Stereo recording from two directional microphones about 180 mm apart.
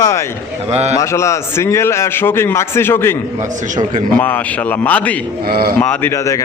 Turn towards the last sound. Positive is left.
turn(degrees=15)  # may be behind; listen again after turning